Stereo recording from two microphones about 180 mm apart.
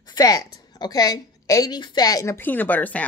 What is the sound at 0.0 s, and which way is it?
A woman's voice, 20° left (ahead or behind).